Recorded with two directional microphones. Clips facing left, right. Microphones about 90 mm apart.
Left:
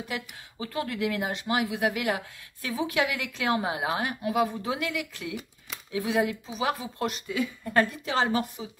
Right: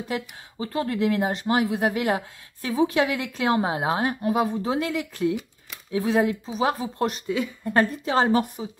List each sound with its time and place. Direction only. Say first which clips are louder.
0.1 s speech: right 5 dB; 35° right (ahead or behind)